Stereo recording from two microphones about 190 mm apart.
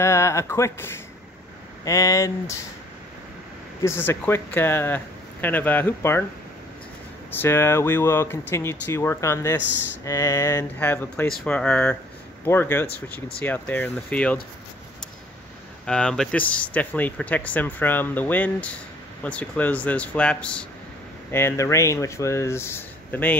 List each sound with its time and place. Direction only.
0.0 s speech: 15° left (ahead or behind)
3.8 s speech: 15° left (ahead or behind)
7.2 s speech: 10° left (ahead or behind)
15.8 s speech: 5° left (ahead or behind)